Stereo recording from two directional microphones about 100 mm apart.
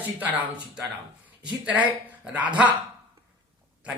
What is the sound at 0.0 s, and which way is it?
Speech, 15° right (ahead or behind).